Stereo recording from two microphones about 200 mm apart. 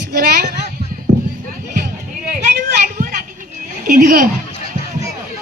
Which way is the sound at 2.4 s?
45° right (ahead or behind).